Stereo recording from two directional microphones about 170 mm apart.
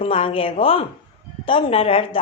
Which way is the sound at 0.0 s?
35° left (ahead or behind).